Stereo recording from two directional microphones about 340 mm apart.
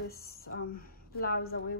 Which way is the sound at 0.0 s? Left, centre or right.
Left.